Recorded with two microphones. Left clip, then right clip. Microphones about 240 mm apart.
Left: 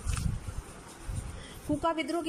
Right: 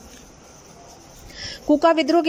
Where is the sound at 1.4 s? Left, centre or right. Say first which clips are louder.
Right 15 dB; right.